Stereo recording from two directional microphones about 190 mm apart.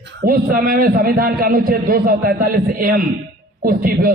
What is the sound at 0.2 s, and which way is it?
A man's voice, 50° right (ahead or behind).